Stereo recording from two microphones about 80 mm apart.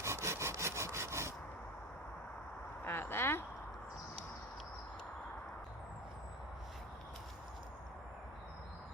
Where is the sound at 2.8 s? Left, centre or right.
Left.